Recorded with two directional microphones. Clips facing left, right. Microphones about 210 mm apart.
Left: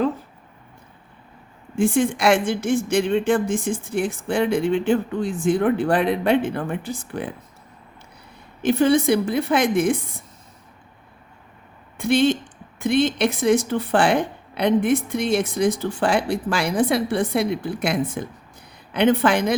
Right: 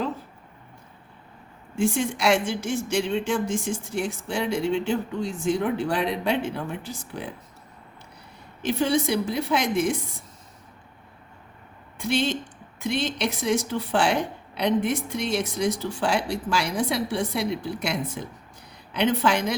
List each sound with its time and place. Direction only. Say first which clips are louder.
1.7 s speech: left 5 dB; 55° left (ahead or behind)
8.6 s speech: left 6 dB; 55° left (ahead or behind)
11.9 s speech: left 7 dB; 55° left (ahead or behind)